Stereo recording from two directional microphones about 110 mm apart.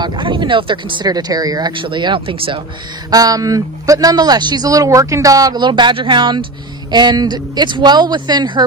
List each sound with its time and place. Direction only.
0.0 s speech: 45° right (ahead or behind)
1.7 s speech: 50° right (ahead or behind)
3.1 s speech: 35° right (ahead or behind)